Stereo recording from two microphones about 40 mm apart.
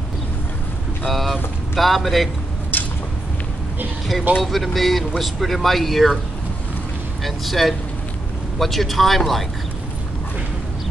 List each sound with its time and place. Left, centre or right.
1.0 s vehicle: centre
1.8 s speech: centre
2.7 s a sound: left
4.4 s speech: centre
7.2 s speech: centre